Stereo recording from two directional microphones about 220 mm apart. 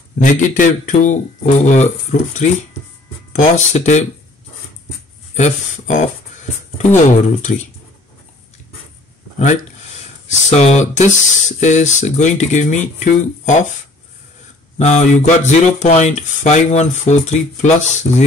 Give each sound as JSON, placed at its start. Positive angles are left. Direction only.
{"t": 0.2, "sound": "speech", "side_deg": 35}
{"t": 5.3, "sound": "speech", "side_deg": 30}
{"t": 7.1, "sound": "speech", "side_deg": 30}
{"t": 10.2, "sound": "speech", "side_deg": 30}
{"t": 14.8, "sound": "speech", "side_deg": 30}